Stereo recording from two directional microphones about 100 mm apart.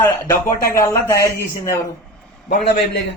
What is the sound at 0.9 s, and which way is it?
Speech, 30° left (ahead or behind).